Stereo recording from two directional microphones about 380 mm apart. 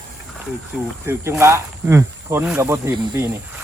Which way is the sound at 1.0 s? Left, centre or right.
Centre.